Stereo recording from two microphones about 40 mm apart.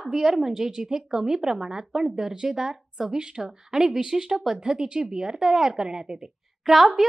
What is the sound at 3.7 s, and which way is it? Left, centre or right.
A woman's voice, centre.